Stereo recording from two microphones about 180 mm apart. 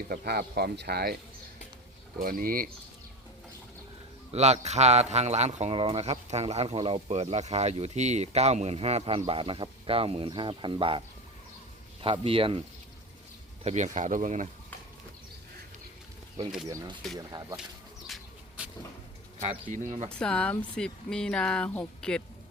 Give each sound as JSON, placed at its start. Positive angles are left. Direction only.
{"t": 0.1, "sound": "speech", "side_deg": -60}
{"t": 2.1, "sound": "speech", "side_deg": -55}
{"t": 4.3, "sound": "speech", "side_deg": -35}
{"t": 12.0, "sound": "speech", "side_deg": -30}
{"t": 13.7, "sound": "speech", "side_deg": -40}
{"t": 16.6, "sound": "speech", "side_deg": -20}
{"t": 18.1, "sound": "bird", "side_deg": -5}
{"t": 19.4, "sound": "speech", "side_deg": -45}
{"t": 20.1, "sound": "speech", "side_deg": 5}